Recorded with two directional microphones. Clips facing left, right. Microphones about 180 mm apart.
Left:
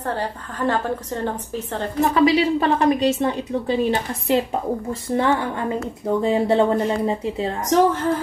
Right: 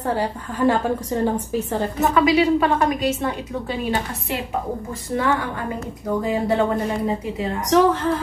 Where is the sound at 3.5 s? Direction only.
25° left (ahead or behind).